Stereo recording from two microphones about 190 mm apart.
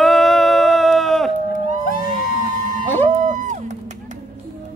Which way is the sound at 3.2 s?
40° right (ahead or behind).